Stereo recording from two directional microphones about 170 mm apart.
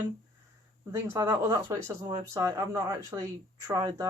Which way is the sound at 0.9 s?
15° right (ahead or behind).